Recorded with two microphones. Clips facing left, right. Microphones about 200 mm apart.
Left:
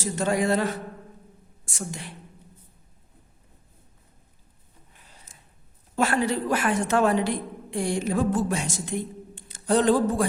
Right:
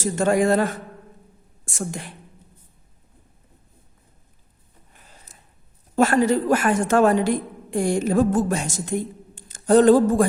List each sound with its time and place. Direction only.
0.0 s a woman's voice: 50° right (ahead or behind)
5.1 s a sound: 40° right (ahead or behind)
6.0 s a woman's voice: 45° right (ahead or behind)